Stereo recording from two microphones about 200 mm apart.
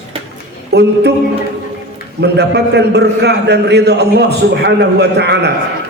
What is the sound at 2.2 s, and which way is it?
A man's voice, 55° right (ahead or behind).